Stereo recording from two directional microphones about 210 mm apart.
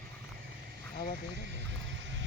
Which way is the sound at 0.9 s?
45° left (ahead or behind).